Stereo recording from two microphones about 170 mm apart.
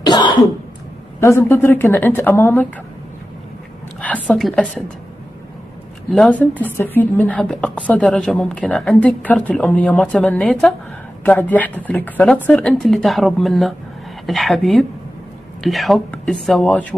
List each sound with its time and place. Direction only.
0.0 s cough: 25° left (ahead or behind)
1.2 s a woman's voice: 15° left (ahead or behind)
4.0 s a woman's voice: 10° left (ahead or behind)
6.1 s a woman's voice: 5° left (ahead or behind)